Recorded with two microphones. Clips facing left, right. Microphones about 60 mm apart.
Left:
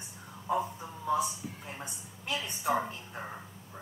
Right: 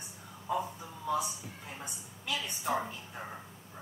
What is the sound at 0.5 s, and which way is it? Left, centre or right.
A man's voice, left.